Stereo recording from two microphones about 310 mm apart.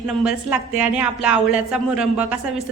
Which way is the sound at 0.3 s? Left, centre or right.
Centre.